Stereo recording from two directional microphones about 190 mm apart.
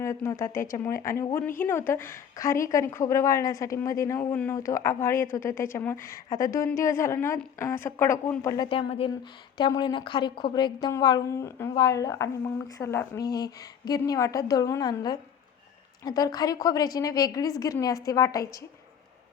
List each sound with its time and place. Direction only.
0.0 s a woman's voice: 15° left (ahead or behind)
0.5 s speech: 45° left (ahead or behind)
0.9 s a woman's voice: 15° left (ahead or behind)